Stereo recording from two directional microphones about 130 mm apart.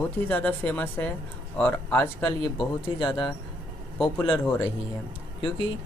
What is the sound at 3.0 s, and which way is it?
Speech, 40° left (ahead or behind).